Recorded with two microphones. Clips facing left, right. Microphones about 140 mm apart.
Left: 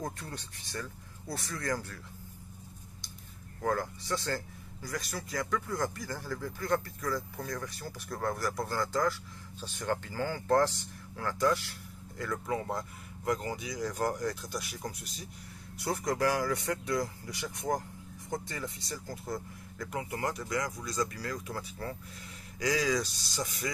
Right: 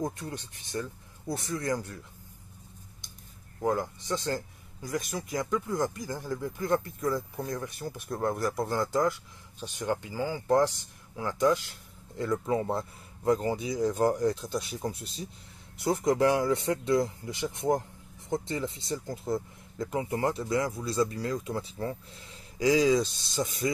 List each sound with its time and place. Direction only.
0.0 s speech: 15° right (ahead or behind)
3.6 s speech: 20° right (ahead or behind)